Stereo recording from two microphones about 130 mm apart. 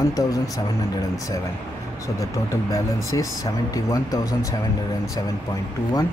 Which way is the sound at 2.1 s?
25° left (ahead or behind).